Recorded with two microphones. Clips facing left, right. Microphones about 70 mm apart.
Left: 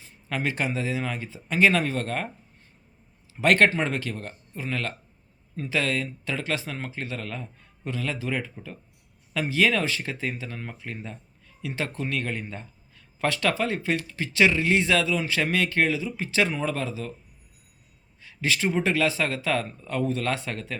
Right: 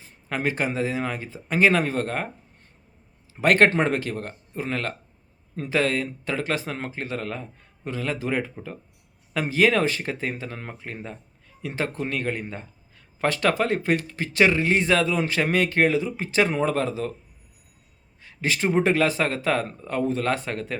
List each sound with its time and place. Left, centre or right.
0.3 s speech: right
3.4 s speech: right
18.3 s speech: right